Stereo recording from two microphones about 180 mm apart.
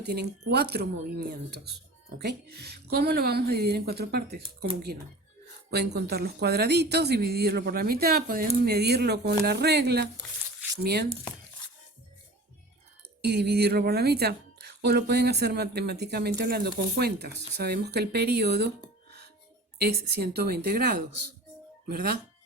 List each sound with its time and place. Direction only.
0.0 s speech: 65° right (ahead or behind)
5.7 s speech: 65° right (ahead or behind)
13.2 s speech: 65° right (ahead or behind)
19.8 s speech: 60° right (ahead or behind)